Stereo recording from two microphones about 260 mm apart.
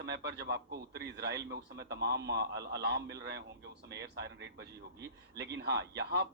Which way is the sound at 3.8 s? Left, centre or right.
Right.